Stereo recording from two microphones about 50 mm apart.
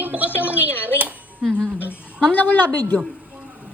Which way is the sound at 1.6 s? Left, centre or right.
Right.